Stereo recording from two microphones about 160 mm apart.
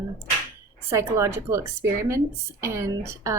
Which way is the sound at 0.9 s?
20° right (ahead or behind).